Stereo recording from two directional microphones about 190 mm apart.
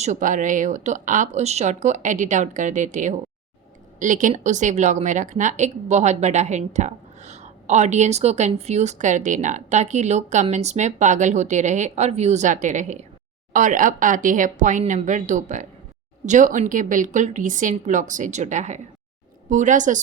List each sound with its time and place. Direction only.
0.0 s a woman's voice: 40° right (ahead or behind)